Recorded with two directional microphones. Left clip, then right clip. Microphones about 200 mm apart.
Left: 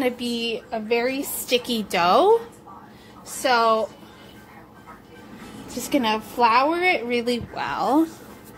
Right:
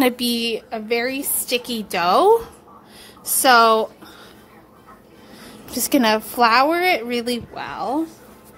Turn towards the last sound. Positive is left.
turn(degrees=0)  # may be behind; listen again after turning